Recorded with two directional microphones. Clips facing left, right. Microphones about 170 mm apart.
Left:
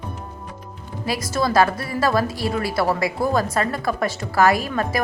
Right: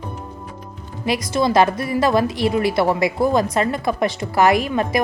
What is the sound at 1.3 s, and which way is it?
A woman's voice, 20° right (ahead or behind).